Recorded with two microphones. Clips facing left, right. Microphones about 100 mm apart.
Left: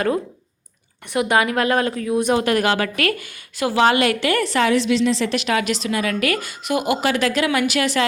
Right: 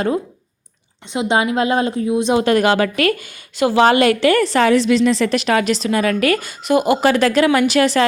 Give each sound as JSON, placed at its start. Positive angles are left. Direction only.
{"t": 1.1, "sound": "a woman's voice", "side_deg": -25}